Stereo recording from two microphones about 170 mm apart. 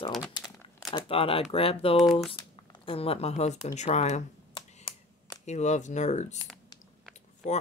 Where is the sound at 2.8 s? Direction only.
35° left (ahead or behind).